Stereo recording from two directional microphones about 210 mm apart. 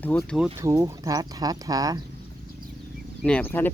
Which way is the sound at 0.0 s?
5° left (ahead or behind).